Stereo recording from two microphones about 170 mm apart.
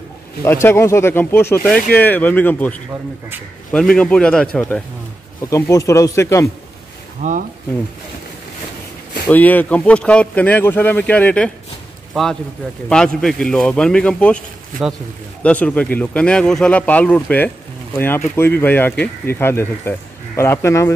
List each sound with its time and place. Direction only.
0.4 s a man's voice: 15° left (ahead or behind)
5.5 s speech: 15° left (ahead or behind)
7.2 s speech: 50° right (ahead or behind)
9.3 s a man's voice: 10° left (ahead or behind)